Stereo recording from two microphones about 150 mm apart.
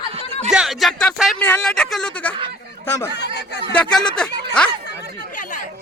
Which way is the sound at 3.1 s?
90° left.